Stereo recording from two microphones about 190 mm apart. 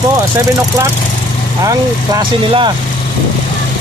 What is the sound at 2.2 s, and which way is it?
Speech, 25° right (ahead or behind).